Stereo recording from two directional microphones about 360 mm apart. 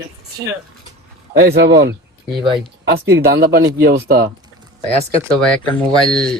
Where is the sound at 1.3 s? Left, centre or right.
Right.